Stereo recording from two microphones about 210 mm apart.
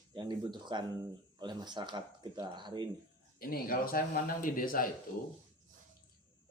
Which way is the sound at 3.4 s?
45° left (ahead or behind).